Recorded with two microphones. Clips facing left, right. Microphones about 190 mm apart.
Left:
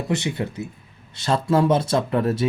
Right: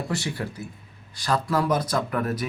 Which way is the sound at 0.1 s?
20° left (ahead or behind).